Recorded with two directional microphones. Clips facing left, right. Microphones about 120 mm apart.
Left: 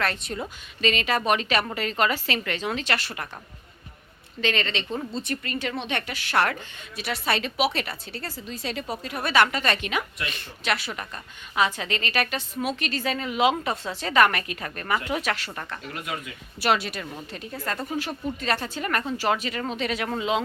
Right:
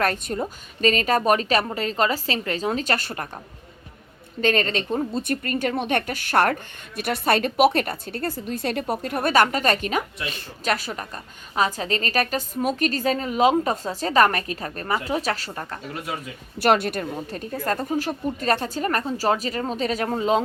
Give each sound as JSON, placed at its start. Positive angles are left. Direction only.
{"t": 0.0, "sound": "a woman's voice", "side_deg": -45}
{"t": 4.4, "sound": "a woman's voice", "side_deg": -45}
{"t": 16.6, "sound": "a woman's voice", "side_deg": -50}